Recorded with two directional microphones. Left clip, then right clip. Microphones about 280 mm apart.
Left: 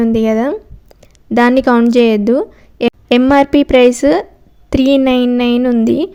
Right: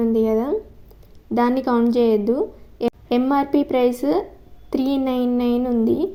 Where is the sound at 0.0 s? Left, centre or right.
Left.